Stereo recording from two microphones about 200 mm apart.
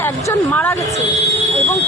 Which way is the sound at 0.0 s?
10° left (ahead or behind).